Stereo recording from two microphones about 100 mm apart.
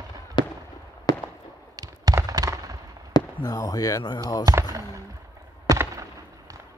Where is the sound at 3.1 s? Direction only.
40° left (ahead or behind).